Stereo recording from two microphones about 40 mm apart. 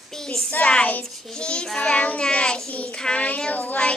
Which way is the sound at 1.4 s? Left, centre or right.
Left.